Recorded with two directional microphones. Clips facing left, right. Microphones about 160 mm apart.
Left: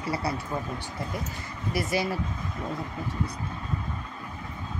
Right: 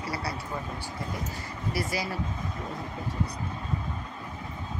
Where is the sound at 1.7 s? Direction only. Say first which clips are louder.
Left 4 dB; 25° left (ahead or behind).